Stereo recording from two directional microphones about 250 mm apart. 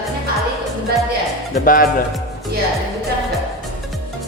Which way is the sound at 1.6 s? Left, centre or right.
Left.